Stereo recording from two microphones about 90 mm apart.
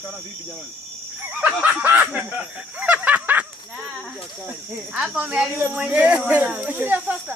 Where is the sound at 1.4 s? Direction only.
15° right (ahead or behind).